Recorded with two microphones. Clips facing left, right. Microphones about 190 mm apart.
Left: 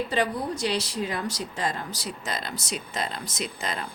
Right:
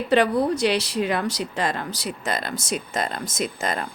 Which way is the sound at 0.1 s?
70° right (ahead or behind).